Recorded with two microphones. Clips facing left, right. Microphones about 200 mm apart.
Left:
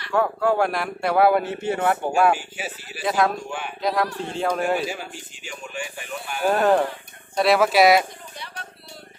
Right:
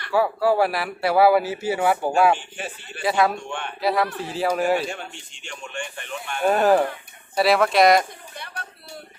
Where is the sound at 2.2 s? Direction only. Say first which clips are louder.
Left 1 dB; 5° left (ahead or behind).